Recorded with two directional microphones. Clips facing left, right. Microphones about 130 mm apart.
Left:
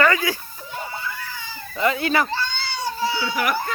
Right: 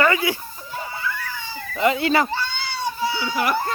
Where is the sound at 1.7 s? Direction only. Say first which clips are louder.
Right 2 dB; 25° right (ahead or behind).